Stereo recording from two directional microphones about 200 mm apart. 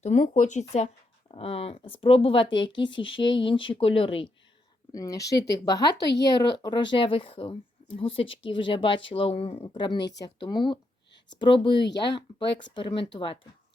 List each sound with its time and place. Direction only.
0.0 s speech: 35° left (ahead or behind)
4.9 s speech: 15° left (ahead or behind)